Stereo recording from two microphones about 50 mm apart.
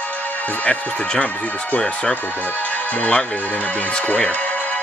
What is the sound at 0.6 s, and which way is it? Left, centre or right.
Speech, left.